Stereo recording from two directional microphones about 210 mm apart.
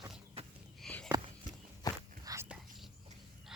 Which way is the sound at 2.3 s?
15° right (ahead or behind).